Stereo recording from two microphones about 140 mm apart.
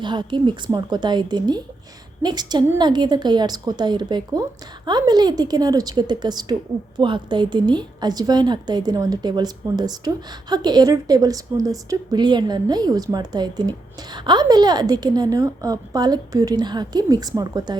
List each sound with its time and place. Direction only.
0.0 s a woman's voice: 35° right (ahead or behind)